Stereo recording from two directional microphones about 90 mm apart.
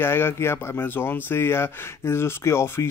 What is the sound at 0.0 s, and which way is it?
Speech, 25° left (ahead or behind).